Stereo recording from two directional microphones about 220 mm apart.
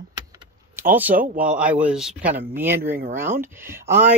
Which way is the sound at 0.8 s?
10° right (ahead or behind).